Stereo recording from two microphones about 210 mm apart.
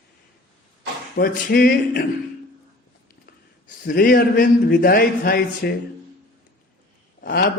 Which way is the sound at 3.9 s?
45° left (ahead or behind).